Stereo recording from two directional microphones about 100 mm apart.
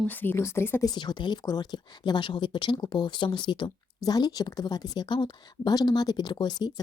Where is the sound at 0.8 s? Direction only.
45° left (ahead or behind).